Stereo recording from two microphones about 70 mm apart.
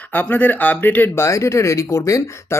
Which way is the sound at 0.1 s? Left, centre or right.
Left.